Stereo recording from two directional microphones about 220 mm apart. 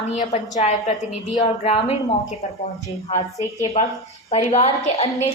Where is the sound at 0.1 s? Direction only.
30° left (ahead or behind).